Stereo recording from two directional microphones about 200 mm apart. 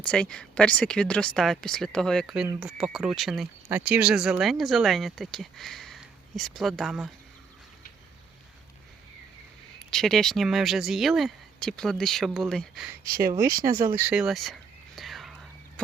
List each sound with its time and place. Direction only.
0.0 s speech: 5° left (ahead or behind)
9.9 s speech: 5° left (ahead or behind)
13.1 s speech: 45° right (ahead or behind)
14.0 s a sound: 5° right (ahead or behind)